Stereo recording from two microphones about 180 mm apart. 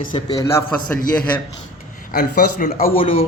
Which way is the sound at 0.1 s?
30° left (ahead or behind).